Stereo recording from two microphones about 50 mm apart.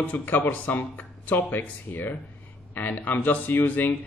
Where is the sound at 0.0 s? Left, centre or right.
Left.